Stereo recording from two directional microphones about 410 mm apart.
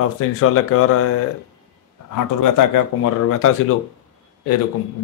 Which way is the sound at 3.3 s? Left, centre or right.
Left.